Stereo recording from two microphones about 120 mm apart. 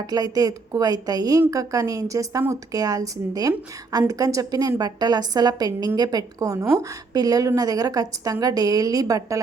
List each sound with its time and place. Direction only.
0.0 s a woman's voice: 30° right (ahead or behind)